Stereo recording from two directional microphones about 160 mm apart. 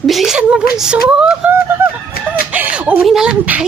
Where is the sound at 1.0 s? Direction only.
5° right (ahead or behind).